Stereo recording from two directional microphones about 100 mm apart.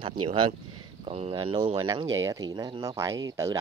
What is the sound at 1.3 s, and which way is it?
Speech, 55° right (ahead or behind).